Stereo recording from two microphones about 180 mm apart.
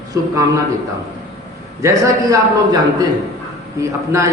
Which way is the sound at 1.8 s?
20° right (ahead or behind).